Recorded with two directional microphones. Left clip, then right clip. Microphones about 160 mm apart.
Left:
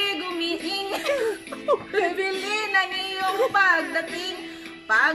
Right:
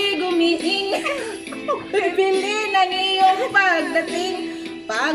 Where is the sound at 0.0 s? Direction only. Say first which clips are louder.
Right 7 dB; 20° right (ahead or behind).